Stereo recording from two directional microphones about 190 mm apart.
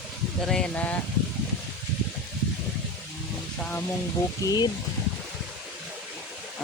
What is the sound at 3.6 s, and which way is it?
Speech, 10° left (ahead or behind).